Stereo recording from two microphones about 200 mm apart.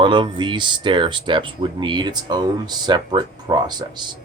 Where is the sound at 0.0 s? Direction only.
25° right (ahead or behind).